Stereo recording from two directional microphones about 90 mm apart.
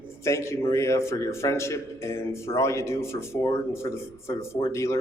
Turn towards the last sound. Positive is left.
turn(degrees=30)  # may be behind; listen again after turning